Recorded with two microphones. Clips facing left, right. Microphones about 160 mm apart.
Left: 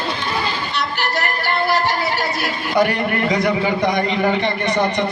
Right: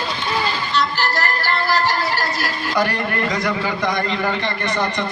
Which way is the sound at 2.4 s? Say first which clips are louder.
Left 5 dB; 20° left (ahead or behind).